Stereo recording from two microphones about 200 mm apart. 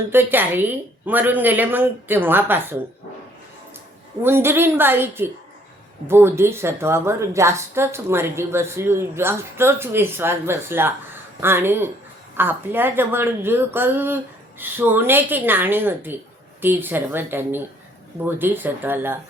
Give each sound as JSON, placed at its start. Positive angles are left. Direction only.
{"t": 0.1, "sound": "a woman's voice", "side_deg": -10}
{"t": 4.2, "sound": "a woman's voice", "side_deg": -10}